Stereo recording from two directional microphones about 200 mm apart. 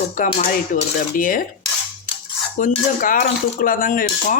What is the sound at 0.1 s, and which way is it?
A woman's voice, 40° left (ahead or behind).